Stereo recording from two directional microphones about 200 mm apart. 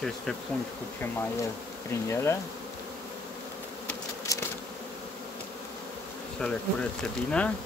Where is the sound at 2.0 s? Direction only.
15° left (ahead or behind).